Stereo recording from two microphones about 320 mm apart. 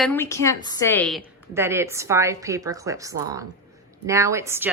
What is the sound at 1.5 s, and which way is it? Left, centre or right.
A woman's voice, centre.